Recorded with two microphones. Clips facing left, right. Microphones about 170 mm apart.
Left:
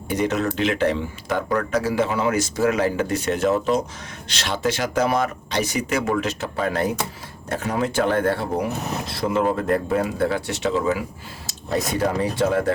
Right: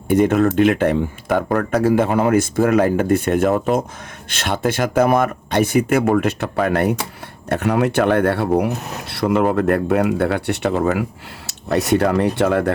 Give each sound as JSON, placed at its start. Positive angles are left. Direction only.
{"t": 0.1, "sound": "speech", "side_deg": -55}